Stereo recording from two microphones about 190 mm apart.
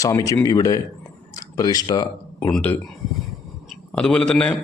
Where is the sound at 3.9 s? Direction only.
5° left (ahead or behind).